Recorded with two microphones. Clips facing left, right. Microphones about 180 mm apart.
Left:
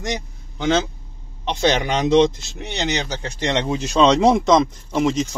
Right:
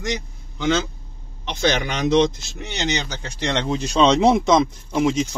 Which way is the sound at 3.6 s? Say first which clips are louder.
Left 1 dB; 5° left (ahead or behind).